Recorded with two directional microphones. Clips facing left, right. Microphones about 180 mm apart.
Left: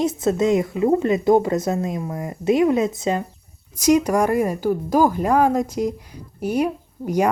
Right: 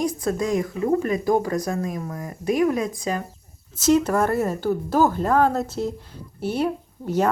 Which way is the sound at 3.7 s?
15° left (ahead or behind).